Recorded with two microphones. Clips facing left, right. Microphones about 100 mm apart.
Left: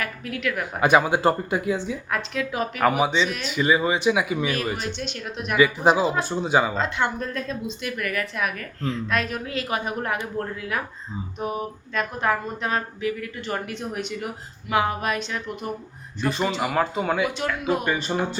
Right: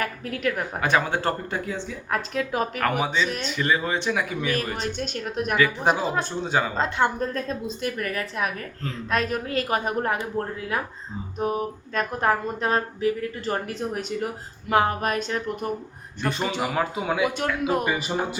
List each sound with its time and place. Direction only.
0.0 s speech: 40° right (ahead or behind)
0.8 s speech: 15° left (ahead or behind)
2.0 s speech: 35° right (ahead or behind)
2.8 s speech: 5° left (ahead or behind)
4.8 s a woman's voice: 45° right (ahead or behind)
5.5 s speech: 5° left (ahead or behind)
6.7 s speech: 40° right (ahead or behind)
16.2 s speech: centre (ahead or behind)